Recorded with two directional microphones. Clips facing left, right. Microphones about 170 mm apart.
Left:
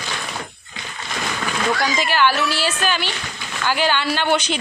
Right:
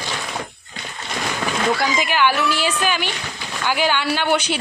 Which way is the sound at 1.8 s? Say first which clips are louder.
Even; 15° right (ahead or behind).